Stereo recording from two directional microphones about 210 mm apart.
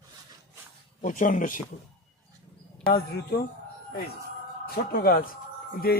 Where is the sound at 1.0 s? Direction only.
40° left (ahead or behind).